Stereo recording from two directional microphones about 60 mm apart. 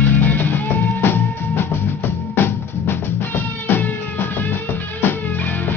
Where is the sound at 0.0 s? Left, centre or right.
Left.